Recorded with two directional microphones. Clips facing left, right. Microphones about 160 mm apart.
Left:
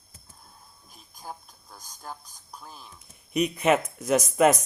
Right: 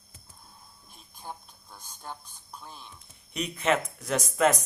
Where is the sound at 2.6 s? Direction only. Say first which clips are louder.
Even; 5° left (ahead or behind).